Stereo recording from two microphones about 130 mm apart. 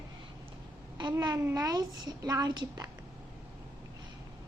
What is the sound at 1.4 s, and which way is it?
A woman's voice, 25° right (ahead or behind).